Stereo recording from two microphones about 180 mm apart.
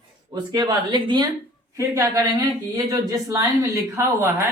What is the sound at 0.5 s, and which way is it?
Speech, 25° right (ahead or behind).